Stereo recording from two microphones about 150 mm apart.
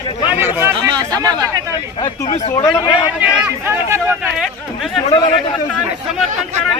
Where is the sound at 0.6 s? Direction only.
25° right (ahead or behind).